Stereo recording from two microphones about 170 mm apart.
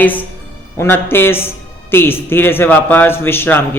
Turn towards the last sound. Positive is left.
turn(degrees=15)  # may be behind; listen again after turning